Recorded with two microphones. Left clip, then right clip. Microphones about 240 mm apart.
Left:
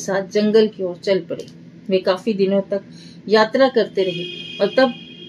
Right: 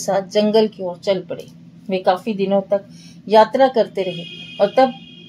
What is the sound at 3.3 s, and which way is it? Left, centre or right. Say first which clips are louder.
Speech: right 2 dB; right.